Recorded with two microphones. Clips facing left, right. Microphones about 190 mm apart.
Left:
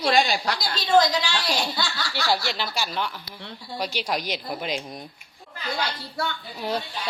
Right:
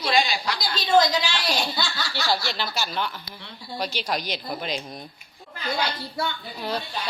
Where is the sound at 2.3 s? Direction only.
5° left (ahead or behind).